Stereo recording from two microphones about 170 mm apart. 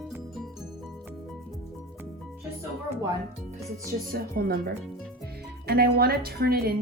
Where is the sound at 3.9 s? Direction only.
60° right (ahead or behind).